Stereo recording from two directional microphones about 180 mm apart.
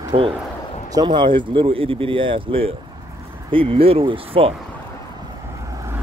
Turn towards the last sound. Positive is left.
turn(degrees=-15)  # may be behind; listen again after turning